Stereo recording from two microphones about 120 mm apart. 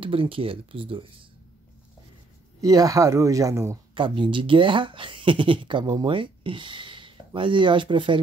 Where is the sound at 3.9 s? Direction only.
45° right (ahead or behind).